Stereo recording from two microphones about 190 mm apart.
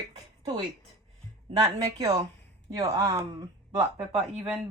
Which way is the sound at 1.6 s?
20° right (ahead or behind).